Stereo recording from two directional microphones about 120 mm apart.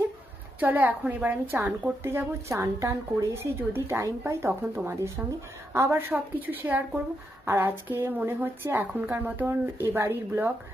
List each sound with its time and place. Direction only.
0.6 s a woman's voice: 15° right (ahead or behind)